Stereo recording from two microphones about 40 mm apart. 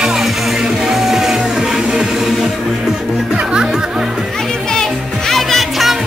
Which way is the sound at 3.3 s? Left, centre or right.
Centre.